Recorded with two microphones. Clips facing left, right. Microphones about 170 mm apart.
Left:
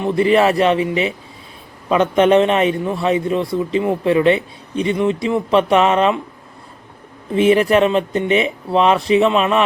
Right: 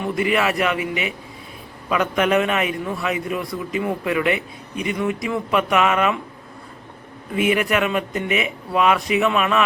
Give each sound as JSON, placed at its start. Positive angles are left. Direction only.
{"t": 0.0, "sound": "a man's voice", "side_deg": 30}
{"t": 7.3, "sound": "a man's voice", "side_deg": 30}